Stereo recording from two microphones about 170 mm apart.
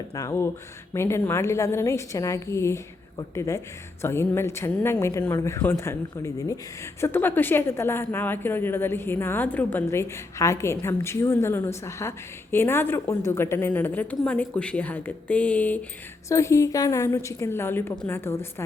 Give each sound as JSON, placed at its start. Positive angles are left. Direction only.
{"t": 0.1, "sound": "a woman's voice", "side_deg": 20}